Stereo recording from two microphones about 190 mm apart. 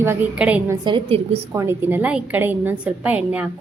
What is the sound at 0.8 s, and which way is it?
Speech, 30° right (ahead or behind).